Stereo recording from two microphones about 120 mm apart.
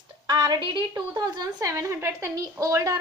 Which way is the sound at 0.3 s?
40° right (ahead or behind).